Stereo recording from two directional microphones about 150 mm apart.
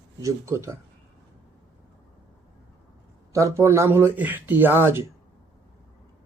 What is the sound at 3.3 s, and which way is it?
Speech, 20° right (ahead or behind).